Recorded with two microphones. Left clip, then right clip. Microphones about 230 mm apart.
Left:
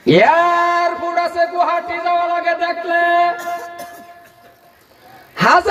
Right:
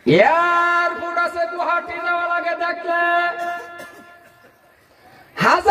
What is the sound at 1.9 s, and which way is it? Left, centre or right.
Music, left.